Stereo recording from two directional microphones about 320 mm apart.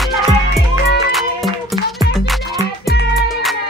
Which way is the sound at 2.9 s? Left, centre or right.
Left.